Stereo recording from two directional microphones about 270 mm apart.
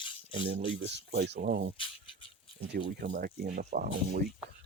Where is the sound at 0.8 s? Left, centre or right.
Right.